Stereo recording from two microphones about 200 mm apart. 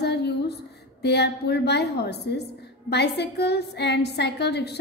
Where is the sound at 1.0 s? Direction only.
55° left (ahead or behind).